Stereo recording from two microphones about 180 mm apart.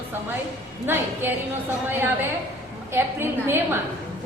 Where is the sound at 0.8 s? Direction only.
10° right (ahead or behind).